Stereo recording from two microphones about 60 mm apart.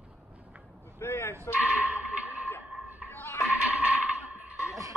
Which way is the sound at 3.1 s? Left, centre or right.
Left.